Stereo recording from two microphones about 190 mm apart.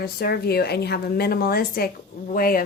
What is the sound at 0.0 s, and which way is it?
A woman's voice, 55° left (ahead or behind).